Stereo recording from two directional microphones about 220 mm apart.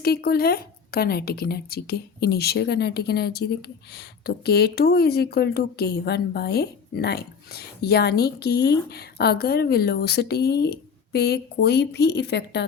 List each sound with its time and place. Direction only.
0.0 s speech: 45° left (ahead or behind)